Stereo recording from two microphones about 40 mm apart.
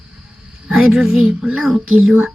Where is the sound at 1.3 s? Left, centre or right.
Right.